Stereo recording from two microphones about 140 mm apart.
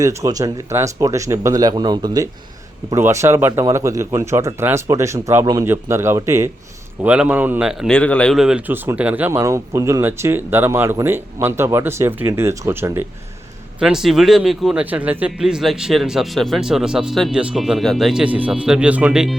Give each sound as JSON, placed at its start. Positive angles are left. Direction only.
{"t": 0.0, "sound": "speech", "side_deg": -20}
{"t": 7.0, "sound": "speech", "side_deg": -10}
{"t": 13.7, "sound": "a man's voice", "side_deg": -5}